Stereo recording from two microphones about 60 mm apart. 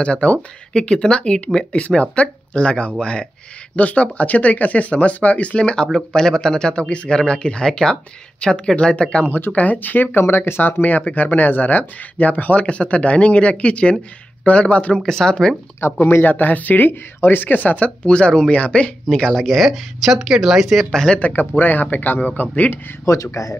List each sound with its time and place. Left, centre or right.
0.0 s speech: centre
9.3 s speech: left
10.8 s speech: left
15.0 s speech: centre
15.8 s speech: left; by 20.8 s centre
20.9 s speech: centre
21.2 s speech: left
23.0 s speech: left